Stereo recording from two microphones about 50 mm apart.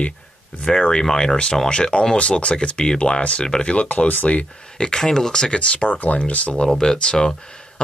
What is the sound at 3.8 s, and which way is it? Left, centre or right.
Speech, left.